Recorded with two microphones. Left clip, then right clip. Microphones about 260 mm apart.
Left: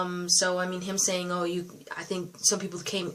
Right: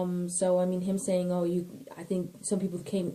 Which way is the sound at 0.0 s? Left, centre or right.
Left.